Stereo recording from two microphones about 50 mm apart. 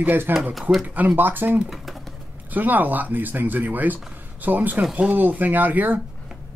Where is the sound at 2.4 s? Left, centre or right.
Right.